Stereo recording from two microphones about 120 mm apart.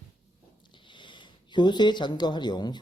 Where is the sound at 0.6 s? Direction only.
40° left (ahead or behind).